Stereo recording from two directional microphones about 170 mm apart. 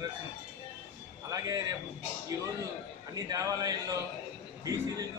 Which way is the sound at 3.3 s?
20° right (ahead or behind).